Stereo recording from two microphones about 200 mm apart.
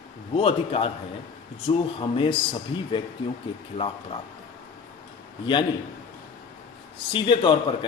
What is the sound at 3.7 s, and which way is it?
Speech, 30° left (ahead or behind).